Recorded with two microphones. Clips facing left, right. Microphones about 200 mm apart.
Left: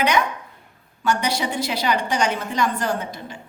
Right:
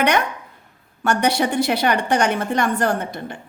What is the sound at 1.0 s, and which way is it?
A woman's voice, 60° right (ahead or behind).